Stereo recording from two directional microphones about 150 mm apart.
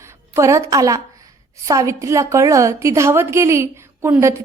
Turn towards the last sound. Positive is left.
turn(degrees=-15)  # may be behind; listen again after turning